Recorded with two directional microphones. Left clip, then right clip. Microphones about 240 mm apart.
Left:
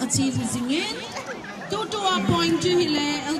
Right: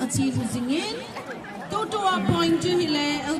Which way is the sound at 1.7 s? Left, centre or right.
Right.